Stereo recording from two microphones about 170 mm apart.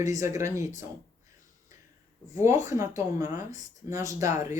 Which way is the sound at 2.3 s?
20° right (ahead or behind).